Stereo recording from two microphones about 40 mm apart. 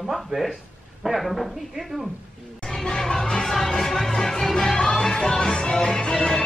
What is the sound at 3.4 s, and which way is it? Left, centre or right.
Music, centre.